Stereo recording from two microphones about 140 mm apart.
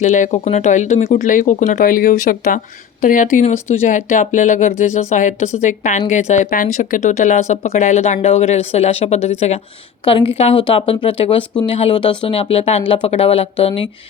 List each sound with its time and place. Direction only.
0.0 s a woman's voice: 60° left (ahead or behind)
3.4 s a woman's voice: 50° left (ahead or behind)
10.0 s a woman's voice: 40° left (ahead or behind)